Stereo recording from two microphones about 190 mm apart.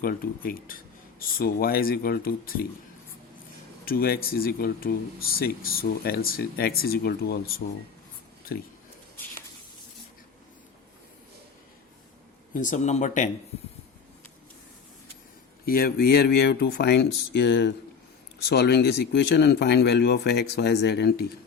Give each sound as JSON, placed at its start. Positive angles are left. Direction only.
{"t": 0.0, "sound": "speech", "side_deg": 50}
{"t": 3.8, "sound": "speech", "side_deg": 50}
{"t": 12.5, "sound": "speech", "side_deg": 40}
{"t": 15.6, "sound": "speech", "side_deg": 50}